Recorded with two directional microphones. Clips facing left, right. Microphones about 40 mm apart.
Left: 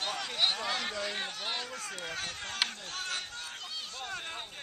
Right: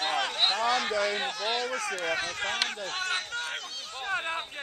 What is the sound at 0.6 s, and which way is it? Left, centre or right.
Speech, right.